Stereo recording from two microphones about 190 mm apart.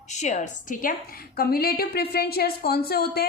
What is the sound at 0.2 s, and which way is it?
A woman's voice, 40° left (ahead or behind).